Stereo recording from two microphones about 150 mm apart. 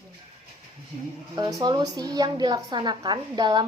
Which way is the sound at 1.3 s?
25° right (ahead or behind).